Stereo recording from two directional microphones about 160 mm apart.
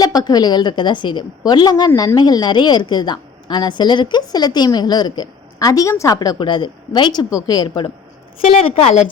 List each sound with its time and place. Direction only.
0.0 s a woman's voice: 25° left (ahead or behind)
8.7 s a woman's voice: 40° left (ahead or behind)